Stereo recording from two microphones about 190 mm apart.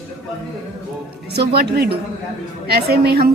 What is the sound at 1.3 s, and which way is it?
A woman's voice, 60° right (ahead or behind).